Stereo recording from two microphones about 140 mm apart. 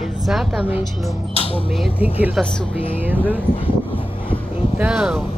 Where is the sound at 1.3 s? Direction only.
40° left (ahead or behind).